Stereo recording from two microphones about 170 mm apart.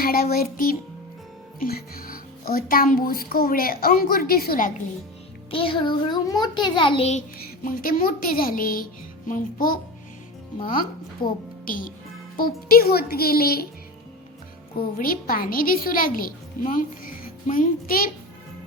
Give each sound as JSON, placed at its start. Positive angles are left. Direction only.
{"t": 0.0, "sound": "speech", "side_deg": 60}
{"t": 5.5, "sound": "a child's voice", "side_deg": 30}
{"t": 11.2, "sound": "a woman's voice", "side_deg": 30}
{"t": 11.6, "sound": "speech", "side_deg": 55}
{"t": 14.9, "sound": "speech", "side_deg": 55}